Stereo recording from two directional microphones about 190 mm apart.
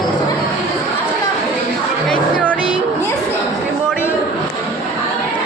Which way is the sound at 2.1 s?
5° left (ahead or behind).